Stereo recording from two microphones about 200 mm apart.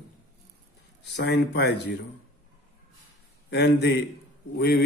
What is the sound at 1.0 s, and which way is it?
Speech, 55° left (ahead or behind).